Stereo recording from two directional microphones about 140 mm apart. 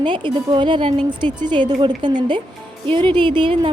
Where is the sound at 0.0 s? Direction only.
35° right (ahead or behind).